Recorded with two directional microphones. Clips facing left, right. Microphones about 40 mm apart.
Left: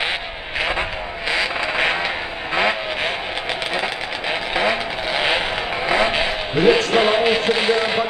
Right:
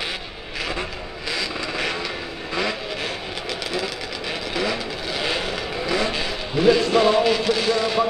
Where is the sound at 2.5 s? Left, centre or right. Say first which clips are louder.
Left 6 dB; left.